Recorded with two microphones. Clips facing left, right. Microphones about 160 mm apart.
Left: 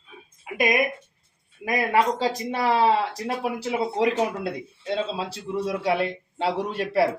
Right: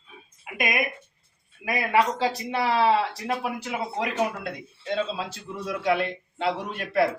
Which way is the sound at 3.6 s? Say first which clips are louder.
Left 6 dB; 30° left (ahead or behind).